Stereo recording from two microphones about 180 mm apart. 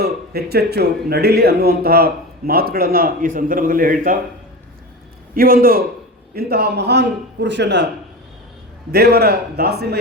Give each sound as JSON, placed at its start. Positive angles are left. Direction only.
{"t": 0.0, "sound": "a man's voice", "side_deg": -60}
{"t": 5.3, "sound": "a man's voice", "side_deg": -55}
{"t": 8.9, "sound": "a man's voice", "side_deg": -60}